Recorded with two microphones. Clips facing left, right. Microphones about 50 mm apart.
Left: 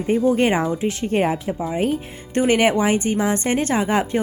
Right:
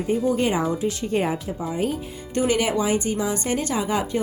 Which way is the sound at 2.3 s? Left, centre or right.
Left.